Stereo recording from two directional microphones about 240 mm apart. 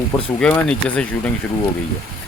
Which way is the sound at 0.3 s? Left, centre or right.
Centre.